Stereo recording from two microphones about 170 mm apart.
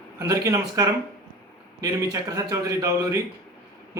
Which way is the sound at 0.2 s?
20° right (ahead or behind).